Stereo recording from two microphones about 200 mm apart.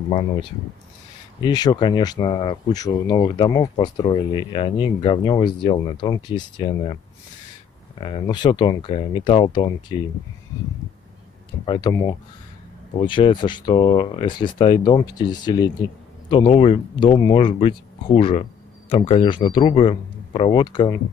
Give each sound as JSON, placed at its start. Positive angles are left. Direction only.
{"t": 0.1, "sound": "speech", "side_deg": 25}
{"t": 8.0, "sound": "speech", "side_deg": 25}
{"t": 11.6, "sound": "speech", "side_deg": 20}